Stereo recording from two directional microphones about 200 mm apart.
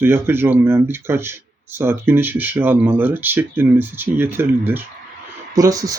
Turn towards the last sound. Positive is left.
turn(degrees=-15)  # may be behind; listen again after turning